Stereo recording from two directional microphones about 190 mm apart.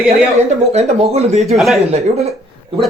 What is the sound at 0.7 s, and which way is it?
Speech, 35° right (ahead or behind).